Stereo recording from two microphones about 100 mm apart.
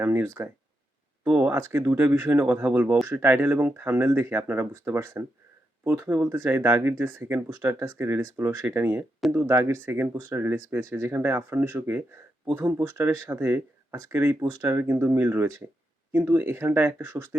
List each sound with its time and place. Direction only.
0.0 s speech: 25° right (ahead or behind)